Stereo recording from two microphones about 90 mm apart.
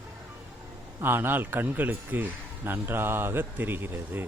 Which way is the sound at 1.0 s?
25° right (ahead or behind).